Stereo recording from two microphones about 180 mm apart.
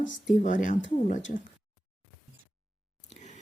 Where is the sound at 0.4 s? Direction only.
45° left (ahead or behind).